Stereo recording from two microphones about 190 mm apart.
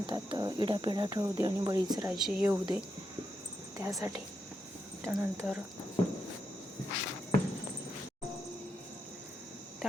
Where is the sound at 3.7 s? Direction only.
15° right (ahead or behind).